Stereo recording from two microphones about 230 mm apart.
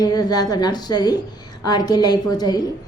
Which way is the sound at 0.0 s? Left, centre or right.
Centre.